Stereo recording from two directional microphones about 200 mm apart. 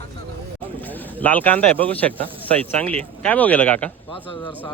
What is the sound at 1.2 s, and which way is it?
Speech, 10° left (ahead or behind).